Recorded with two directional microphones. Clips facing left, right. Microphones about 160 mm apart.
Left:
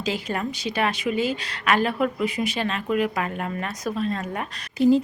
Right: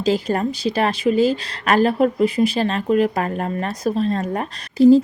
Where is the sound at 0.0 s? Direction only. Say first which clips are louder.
Right 8 dB; 35° right (ahead or behind).